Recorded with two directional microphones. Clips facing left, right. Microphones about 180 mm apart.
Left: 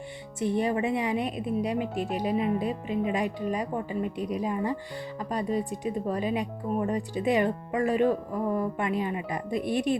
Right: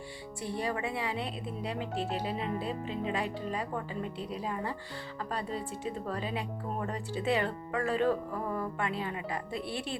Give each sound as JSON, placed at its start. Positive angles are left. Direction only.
{"t": 0.3, "sound": "speech", "side_deg": 20}